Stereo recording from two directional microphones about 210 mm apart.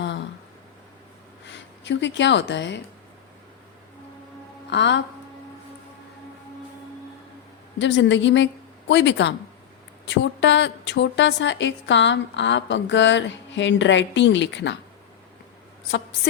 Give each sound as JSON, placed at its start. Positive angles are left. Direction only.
{"t": 0.0, "sound": "a sound", "side_deg": 60}
{"t": 1.5, "sound": "speech", "side_deg": 55}
{"t": 4.7, "sound": "a woman's voice", "side_deg": 55}
{"t": 7.8, "sound": "a woman's voice", "side_deg": 60}